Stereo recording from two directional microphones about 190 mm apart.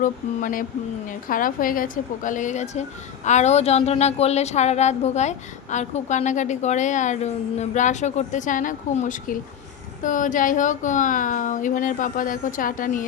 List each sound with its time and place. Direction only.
0.0 s a woman's voice: 45° left (ahead or behind)